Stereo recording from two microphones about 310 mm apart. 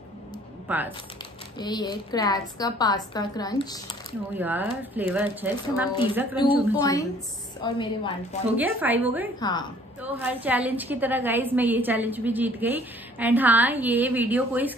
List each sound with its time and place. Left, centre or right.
0.7 s speech: centre
1.6 s a woman's voice: centre
4.4 s a woman's voice: centre
6.8 s a woman's voice: centre
8.5 s a woman's voice: centre
9.4 s a woman's voice: centre
10.0 s a woman's voice: centre